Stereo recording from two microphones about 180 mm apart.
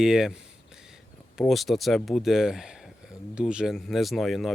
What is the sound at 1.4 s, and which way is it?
Speech, centre (ahead or behind).